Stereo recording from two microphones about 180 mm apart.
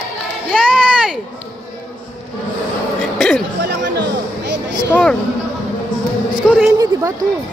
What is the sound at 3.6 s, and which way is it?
Music, 65° right (ahead or behind).